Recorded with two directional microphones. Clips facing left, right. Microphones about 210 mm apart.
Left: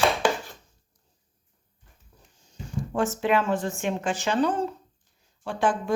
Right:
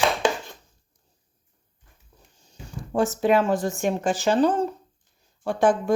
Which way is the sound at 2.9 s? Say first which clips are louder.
Right 4 dB; 35° right (ahead or behind).